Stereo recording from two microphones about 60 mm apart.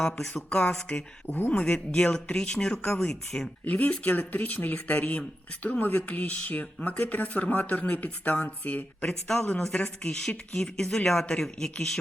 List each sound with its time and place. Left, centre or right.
0.0 s speech: centre
1.3 s speech: left; by 3.5 s centre
3.7 s speech: left
10.1 s speech: centre